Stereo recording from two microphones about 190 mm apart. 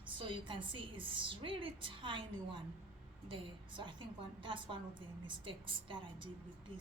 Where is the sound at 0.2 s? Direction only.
25° right (ahead or behind).